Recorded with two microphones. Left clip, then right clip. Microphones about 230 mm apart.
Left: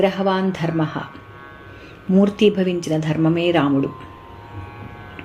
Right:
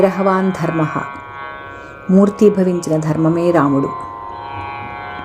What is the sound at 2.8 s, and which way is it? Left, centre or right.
Speech, centre.